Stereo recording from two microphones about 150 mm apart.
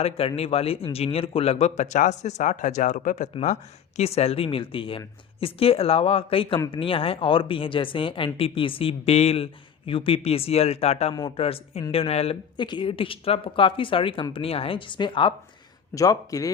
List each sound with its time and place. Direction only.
0.0 s speech: 40° left (ahead or behind)
16.0 s a man's voice: 20° left (ahead or behind)